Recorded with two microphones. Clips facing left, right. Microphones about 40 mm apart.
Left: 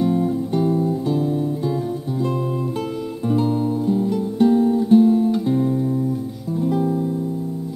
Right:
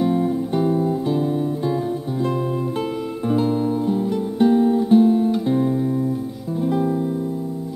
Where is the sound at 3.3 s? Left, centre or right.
Centre.